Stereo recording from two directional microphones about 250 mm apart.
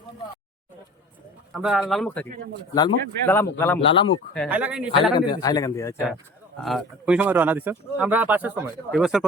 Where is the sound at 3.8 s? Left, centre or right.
Left.